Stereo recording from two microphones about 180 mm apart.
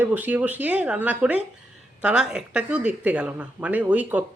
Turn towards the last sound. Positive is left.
turn(degrees=-10)  # may be behind; listen again after turning